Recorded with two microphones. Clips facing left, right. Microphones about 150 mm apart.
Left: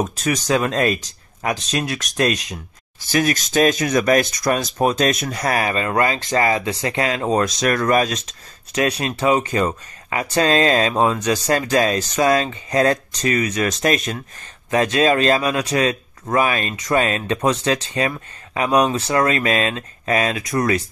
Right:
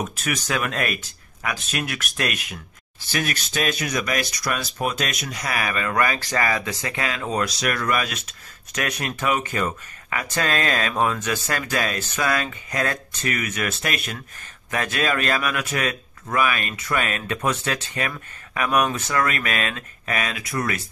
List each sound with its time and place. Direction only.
0.0 s speech: 40° left (ahead or behind)
3.0 s speech: 40° left (ahead or behind)
8.7 s speech: 30° left (ahead or behind)
14.7 s speech: 20° left (ahead or behind)